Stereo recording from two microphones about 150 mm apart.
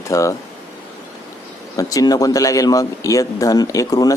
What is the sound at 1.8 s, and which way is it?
Speech, 25° left (ahead or behind).